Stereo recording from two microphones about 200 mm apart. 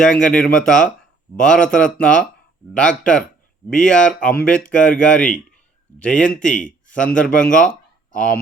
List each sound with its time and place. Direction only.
0.0 s speech: 5° left (ahead or behind)
6.6 s a sound: 40° left (ahead or behind)
6.9 s speech: 5° left (ahead or behind)